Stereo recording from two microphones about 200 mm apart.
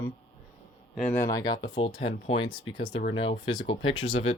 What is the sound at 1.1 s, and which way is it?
Speech, 15° left (ahead or behind).